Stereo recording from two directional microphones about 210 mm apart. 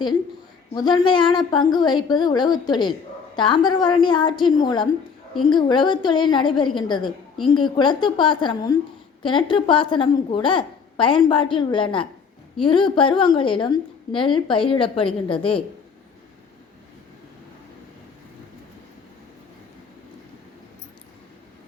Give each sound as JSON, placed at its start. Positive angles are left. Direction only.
{"t": 0.7, "sound": "a woman's voice", "side_deg": 20}